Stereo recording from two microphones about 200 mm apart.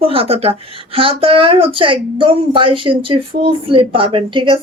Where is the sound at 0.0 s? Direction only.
30° right (ahead or behind).